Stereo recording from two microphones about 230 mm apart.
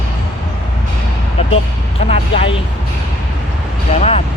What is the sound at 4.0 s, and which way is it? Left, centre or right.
Speech, left.